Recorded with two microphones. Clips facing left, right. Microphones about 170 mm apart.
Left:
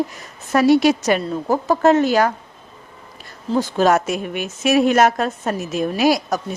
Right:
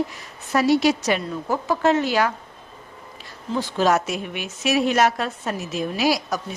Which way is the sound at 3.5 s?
45° left (ahead or behind).